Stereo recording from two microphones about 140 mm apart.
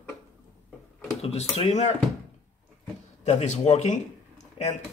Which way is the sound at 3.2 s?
50° left (ahead or behind).